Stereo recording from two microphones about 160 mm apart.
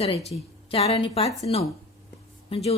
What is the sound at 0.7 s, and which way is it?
Speech, 40° left (ahead or behind).